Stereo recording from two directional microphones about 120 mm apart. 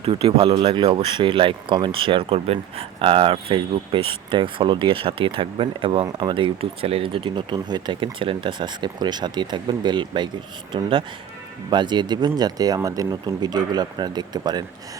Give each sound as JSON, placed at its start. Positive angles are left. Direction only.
{"t": 0.0, "sound": "speech", "side_deg": -50}